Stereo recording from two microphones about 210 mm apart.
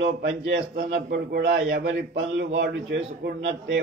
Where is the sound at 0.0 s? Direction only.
60° right (ahead or behind).